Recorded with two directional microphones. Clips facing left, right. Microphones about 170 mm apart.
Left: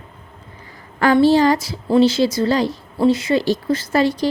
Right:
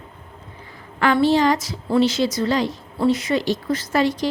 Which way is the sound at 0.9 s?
40° left (ahead or behind).